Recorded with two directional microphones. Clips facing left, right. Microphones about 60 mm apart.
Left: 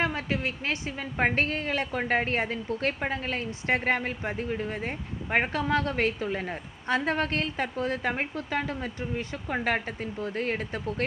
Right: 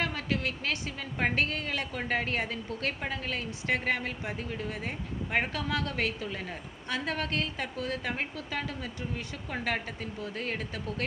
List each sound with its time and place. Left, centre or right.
0.0 s a woman's voice: left